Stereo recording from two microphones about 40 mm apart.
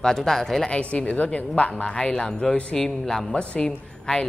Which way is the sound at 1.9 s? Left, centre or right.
Centre.